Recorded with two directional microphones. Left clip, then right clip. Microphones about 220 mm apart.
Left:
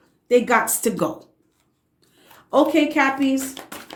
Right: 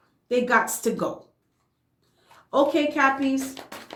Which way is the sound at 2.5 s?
35° left (ahead or behind).